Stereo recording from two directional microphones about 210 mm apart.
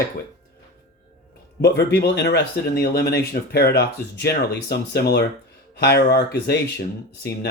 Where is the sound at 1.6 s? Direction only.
50° left (ahead or behind).